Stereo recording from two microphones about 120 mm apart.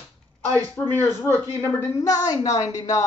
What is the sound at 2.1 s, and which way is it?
Speech, 30° left (ahead or behind).